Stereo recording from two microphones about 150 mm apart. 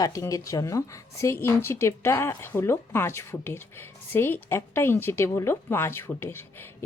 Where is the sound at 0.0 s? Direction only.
25° left (ahead or behind).